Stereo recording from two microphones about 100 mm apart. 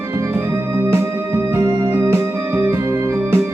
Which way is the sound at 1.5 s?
25° right (ahead or behind).